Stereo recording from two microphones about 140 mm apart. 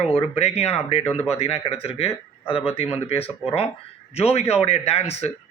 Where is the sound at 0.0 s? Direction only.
45° left (ahead or behind).